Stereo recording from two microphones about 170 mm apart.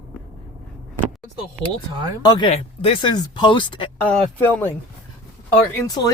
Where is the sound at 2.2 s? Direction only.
25° left (ahead or behind).